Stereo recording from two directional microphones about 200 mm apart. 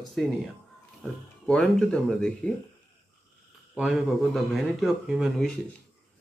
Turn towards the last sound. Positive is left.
turn(degrees=0)  # may be behind; listen again after turning